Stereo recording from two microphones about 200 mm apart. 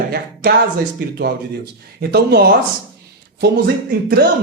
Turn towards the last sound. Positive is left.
turn(degrees=-50)  # may be behind; listen again after turning